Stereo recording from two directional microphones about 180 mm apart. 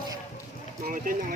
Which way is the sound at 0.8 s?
50° right (ahead or behind).